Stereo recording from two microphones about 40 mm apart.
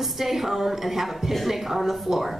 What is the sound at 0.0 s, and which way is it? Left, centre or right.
A woman's voice, centre.